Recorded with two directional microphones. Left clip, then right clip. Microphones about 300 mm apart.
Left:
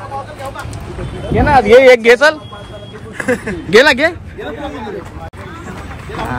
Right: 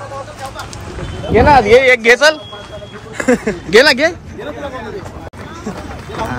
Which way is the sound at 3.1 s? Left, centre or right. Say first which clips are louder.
Right 3 dB; right.